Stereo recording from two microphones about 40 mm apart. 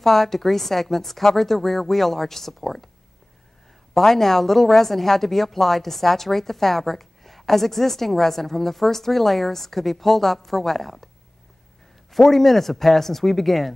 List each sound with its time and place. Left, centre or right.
0.0 s a woman's voice: centre
3.9 s a woman's voice: centre
12.2 s a woman's voice: centre